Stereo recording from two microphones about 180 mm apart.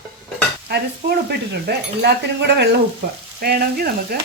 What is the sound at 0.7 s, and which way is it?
Speech, 60° right (ahead or behind).